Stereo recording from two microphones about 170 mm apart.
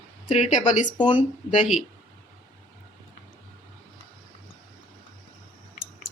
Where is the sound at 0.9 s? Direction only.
25° left (ahead or behind).